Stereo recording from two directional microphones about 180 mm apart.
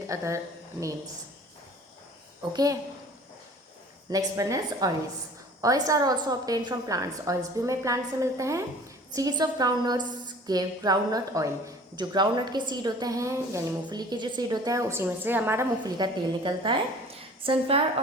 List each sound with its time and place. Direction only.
0.1 s speech: 15° right (ahead or behind)
2.5 s a woman's voice: 20° right (ahead or behind)
4.1 s a woman's voice: 20° right (ahead or behind)
16.0 s a woman's voice: 25° right (ahead or behind)